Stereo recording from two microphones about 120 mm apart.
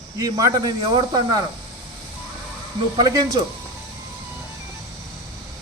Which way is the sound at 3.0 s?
30° right (ahead or behind).